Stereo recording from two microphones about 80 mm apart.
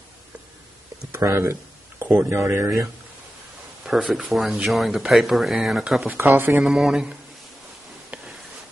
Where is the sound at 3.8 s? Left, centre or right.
Centre.